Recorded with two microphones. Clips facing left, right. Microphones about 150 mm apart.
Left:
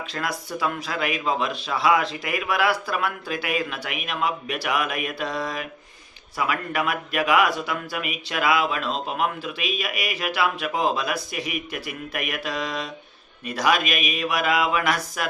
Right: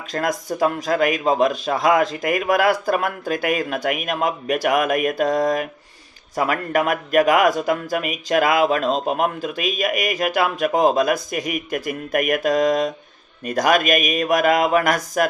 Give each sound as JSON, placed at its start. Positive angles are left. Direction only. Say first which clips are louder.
{"t": 0.1, "sound": "speech", "louder": "right 9 dB", "side_deg": -45}